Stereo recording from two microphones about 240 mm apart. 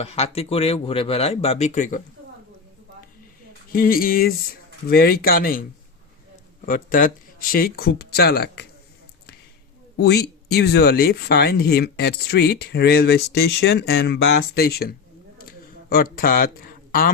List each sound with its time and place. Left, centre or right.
0.0 s speech: left
3.7 s speech: left
6.7 s speech: left
10.0 s speech: left
15.4 s a sound: left